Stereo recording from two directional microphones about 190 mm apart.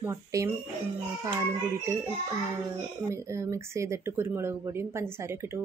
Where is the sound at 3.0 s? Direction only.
15° right (ahead or behind).